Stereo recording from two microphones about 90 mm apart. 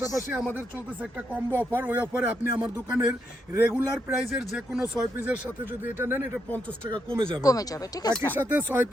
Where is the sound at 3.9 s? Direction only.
Centre (ahead or behind).